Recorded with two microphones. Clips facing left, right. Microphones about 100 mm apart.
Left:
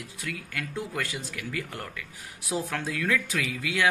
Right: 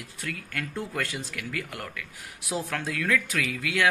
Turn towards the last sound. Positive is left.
turn(degrees=20)  # may be behind; listen again after turning